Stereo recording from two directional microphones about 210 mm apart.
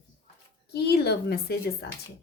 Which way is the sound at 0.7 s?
50° left (ahead or behind).